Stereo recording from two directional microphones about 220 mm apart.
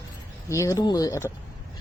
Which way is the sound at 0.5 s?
15° left (ahead or behind).